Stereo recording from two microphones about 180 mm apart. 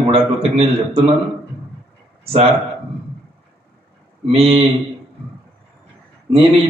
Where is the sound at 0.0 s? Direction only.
30° right (ahead or behind).